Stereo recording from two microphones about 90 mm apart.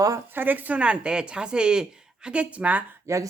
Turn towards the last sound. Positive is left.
turn(degrees=-35)  # may be behind; listen again after turning